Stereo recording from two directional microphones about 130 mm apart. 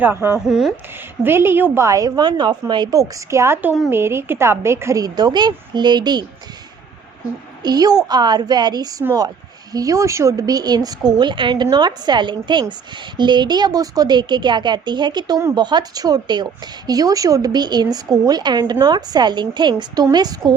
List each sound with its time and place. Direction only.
0.0 s speech: 15° right (ahead or behind)
0.3 s speech: 5° right (ahead or behind)
1.2 s a woman's voice: 15° right (ahead or behind); by 6.2 s 35° right (ahead or behind)
7.6 s a woman's voice: 30° right (ahead or behind)